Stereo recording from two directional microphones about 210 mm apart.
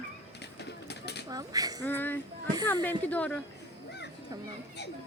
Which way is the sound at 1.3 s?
15° right (ahead or behind).